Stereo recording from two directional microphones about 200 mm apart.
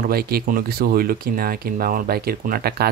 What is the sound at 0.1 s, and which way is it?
Speech, 50° right (ahead or behind).